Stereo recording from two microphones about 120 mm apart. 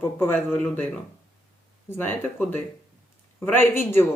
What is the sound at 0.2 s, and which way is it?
Speech, 15° left (ahead or behind).